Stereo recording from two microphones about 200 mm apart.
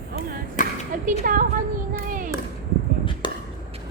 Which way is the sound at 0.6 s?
40° left (ahead or behind).